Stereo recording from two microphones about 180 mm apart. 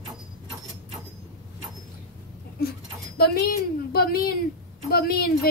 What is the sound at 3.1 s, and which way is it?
A woman's voice, 55° left (ahead or behind).